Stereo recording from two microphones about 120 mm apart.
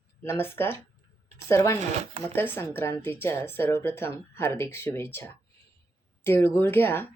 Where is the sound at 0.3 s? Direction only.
20° left (ahead or behind).